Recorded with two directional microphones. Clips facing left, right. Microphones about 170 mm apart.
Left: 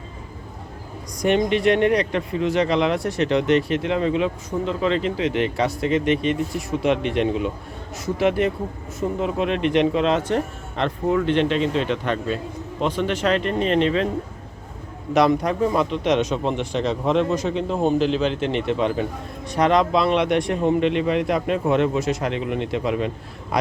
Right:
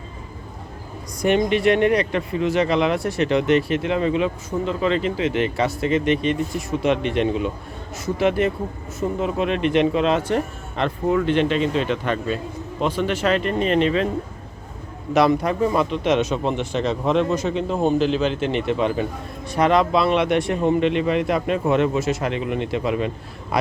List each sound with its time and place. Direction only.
1.1 s speech: 5° right (ahead or behind)
15.1 s speech: 5° right (ahead or behind)